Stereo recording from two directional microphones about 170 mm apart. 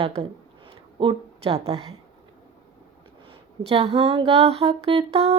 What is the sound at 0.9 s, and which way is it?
A woman's voice, 30° right (ahead or behind).